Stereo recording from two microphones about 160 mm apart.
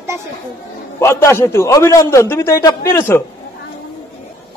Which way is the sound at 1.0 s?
15° left (ahead or behind).